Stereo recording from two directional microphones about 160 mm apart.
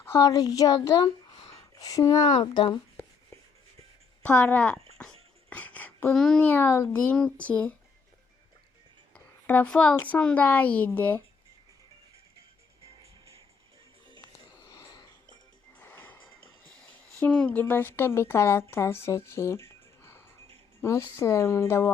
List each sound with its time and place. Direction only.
0.0 s speech: 15° left (ahead or behind)
4.2 s a woman's voice: 5° left (ahead or behind)
9.1 s a woman's voice: 10° left (ahead or behind)
14.7 s a sound: 25° left (ahead or behind)
15.8 s music: 10° left (ahead or behind)
16.7 s a woman's voice: 5° left (ahead or behind)